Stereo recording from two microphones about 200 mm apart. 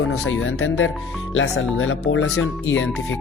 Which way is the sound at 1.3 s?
75° left (ahead or behind).